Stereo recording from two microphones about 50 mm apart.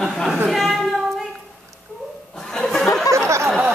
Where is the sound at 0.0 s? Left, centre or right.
Centre.